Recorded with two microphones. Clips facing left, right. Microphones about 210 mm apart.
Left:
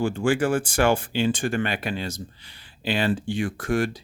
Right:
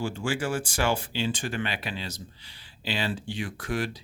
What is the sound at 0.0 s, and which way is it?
Speech, 55° left (ahead or behind).